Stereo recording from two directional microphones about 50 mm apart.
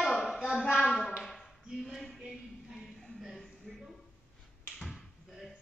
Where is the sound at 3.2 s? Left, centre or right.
Centre.